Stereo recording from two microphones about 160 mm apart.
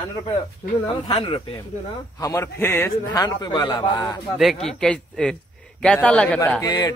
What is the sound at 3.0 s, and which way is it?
A man's voice, 25° left (ahead or behind).